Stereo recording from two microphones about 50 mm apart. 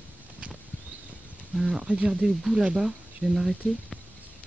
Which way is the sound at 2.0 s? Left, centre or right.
Right.